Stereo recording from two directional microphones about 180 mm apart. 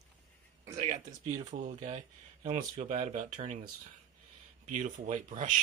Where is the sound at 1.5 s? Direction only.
40° right (ahead or behind).